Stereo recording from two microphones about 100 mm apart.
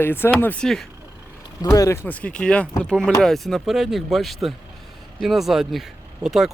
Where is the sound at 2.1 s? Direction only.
15° left (ahead or behind); by 6.5 s 5° right (ahead or behind).